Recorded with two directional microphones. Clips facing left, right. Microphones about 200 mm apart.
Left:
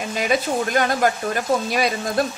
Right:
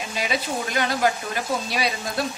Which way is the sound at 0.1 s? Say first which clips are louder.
Left 6 dB; 50° left (ahead or behind).